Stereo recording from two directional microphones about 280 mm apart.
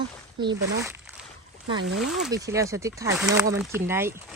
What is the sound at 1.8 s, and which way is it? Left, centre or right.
Speech, right.